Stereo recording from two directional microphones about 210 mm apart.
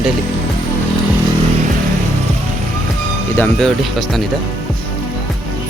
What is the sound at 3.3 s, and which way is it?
Speech, 10° left (ahead or behind).